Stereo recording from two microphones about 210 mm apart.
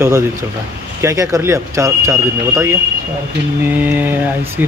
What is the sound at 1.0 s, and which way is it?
A man's voice, 15° right (ahead or behind).